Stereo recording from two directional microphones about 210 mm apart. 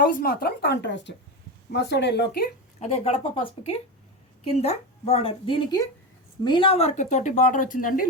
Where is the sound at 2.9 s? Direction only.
30° left (ahead or behind).